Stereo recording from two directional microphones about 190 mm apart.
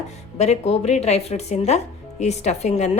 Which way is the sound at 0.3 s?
35° left (ahead or behind).